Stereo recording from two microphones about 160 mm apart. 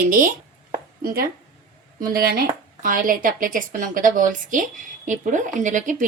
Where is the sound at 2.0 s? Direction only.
65° right (ahead or behind).